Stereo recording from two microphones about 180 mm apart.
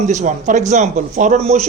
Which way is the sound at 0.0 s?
40° right (ahead or behind).